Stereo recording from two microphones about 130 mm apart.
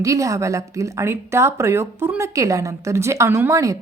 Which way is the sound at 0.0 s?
25° right (ahead or behind).